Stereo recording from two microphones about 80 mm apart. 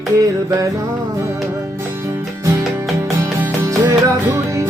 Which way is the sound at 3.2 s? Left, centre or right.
Right.